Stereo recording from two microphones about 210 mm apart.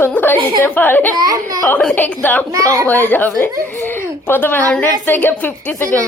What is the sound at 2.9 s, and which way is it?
A woman's voice, 10° left (ahead or behind).